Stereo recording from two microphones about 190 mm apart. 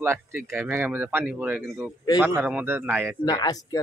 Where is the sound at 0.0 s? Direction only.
15° right (ahead or behind).